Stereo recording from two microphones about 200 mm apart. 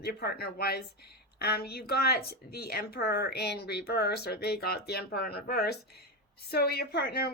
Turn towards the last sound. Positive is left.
turn(degrees=50)  # may be behind; listen again after turning